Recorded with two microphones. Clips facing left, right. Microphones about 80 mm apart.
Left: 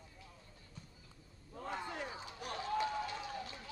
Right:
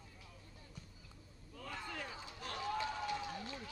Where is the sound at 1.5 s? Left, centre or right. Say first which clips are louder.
Left 4 dB; left.